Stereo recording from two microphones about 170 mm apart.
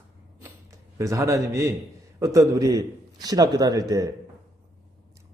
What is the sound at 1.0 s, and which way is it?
Speech, 20° right (ahead or behind).